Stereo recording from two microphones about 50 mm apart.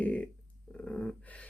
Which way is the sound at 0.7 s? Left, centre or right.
Left.